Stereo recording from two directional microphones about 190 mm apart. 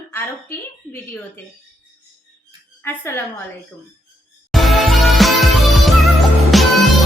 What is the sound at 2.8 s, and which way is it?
Speech, 10° left (ahead or behind).